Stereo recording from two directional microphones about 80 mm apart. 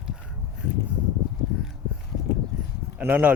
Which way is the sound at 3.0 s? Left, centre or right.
Right.